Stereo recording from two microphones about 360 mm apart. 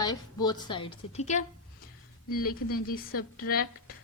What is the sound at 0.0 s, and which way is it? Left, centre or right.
A woman's voice, centre.